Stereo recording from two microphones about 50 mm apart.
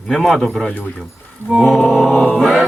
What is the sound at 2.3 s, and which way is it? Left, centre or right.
Mantra, centre.